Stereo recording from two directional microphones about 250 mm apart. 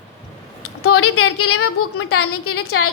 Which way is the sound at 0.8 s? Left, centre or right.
Left.